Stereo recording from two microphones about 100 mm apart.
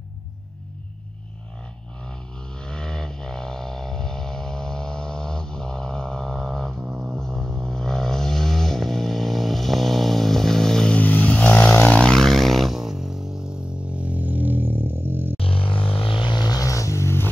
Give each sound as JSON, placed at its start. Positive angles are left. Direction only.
{"t": 2.6, "sound": "vehicle", "side_deg": 5}
{"t": 6.8, "sound": "music", "side_deg": -10}
{"t": 7.2, "sound": "vehicle", "side_deg": 5}
{"t": 12.0, "sound": "a sound", "side_deg": 5}
{"t": 15.3, "sound": "vehicle", "side_deg": 70}